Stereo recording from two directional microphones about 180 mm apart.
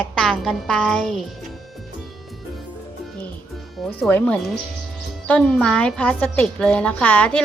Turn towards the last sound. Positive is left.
turn(degrees=5)  # may be behind; listen again after turning